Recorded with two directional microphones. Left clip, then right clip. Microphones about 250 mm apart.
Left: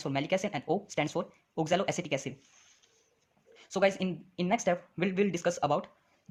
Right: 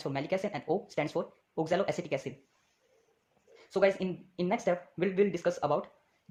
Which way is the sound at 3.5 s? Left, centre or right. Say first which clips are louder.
Right 1 dB; centre.